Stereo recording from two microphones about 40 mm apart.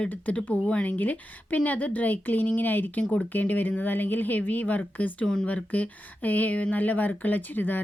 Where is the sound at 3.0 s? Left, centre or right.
Left.